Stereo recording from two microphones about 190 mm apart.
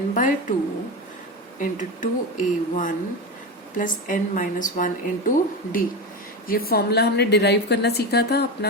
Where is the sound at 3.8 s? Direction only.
45° left (ahead or behind).